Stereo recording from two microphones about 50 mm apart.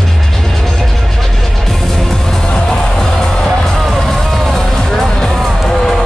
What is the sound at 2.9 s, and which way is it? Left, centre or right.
Music, centre.